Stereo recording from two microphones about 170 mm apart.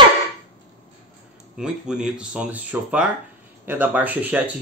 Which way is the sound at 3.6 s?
10° right (ahead or behind).